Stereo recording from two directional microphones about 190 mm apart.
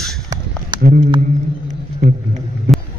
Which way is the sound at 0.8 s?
50° right (ahead or behind).